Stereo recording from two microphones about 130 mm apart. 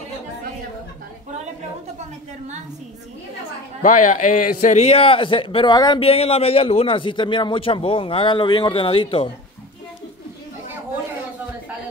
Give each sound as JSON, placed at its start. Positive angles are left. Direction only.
{"t": 3.8, "sound": "a man's voice", "side_deg": 75}
{"t": 5.9, "sound": "a man's voice", "side_deg": 45}